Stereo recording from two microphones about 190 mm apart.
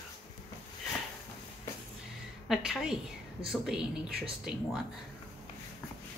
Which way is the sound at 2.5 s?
Centre (ahead or behind).